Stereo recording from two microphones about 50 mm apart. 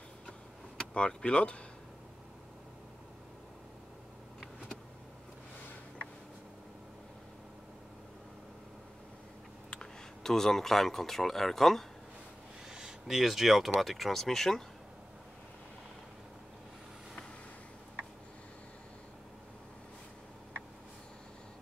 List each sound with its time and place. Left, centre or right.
0.9 s speech: left
9.7 s speech: centre
12.7 s speech: centre